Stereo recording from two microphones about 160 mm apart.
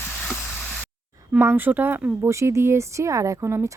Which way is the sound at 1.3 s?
15° right (ahead or behind).